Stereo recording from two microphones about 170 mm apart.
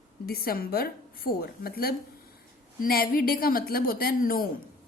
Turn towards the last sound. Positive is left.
turn(degrees=60)  # may be behind; listen again after turning